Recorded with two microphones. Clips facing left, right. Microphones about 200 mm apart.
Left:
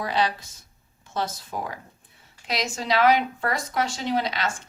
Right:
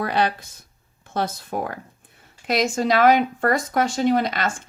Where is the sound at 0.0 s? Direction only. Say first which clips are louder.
Right 3 dB; 55° right (ahead or behind).